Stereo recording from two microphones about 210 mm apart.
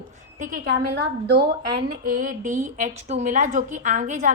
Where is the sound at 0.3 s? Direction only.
40° right (ahead or behind).